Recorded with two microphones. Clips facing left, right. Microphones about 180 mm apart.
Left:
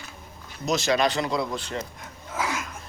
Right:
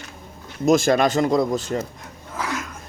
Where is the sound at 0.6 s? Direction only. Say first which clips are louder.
Right 6 dB; 50° right (ahead or behind).